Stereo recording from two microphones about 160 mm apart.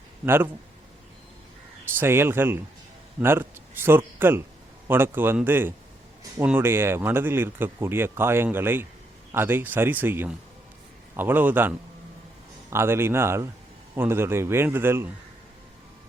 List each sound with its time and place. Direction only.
0.3 s speech: 15° right (ahead or behind)
2.0 s speech: 15° right (ahead or behind)
12.7 s speech: 15° right (ahead or behind)